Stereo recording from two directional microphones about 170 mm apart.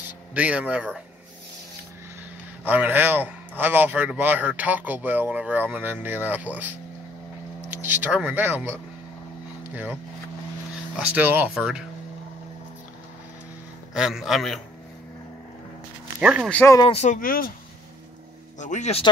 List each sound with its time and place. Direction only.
0.3 s a man's voice: 5° right (ahead or behind)
2.6 s a man's voice: 10° right (ahead or behind)
7.7 s speech: 10° right (ahead or behind)
9.6 s vehicle: 10° right (ahead or behind)
11.0 s speech: 10° right (ahead or behind)
13.9 s speech: centre (ahead or behind)
16.2 s a man's voice: 5° right (ahead or behind)
16.4 s speech: 10° left (ahead or behind)
16.7 s speech: 35° left (ahead or behind); by 17.5 s 55° left (ahead or behind)
18.6 s speech: 45° left (ahead or behind)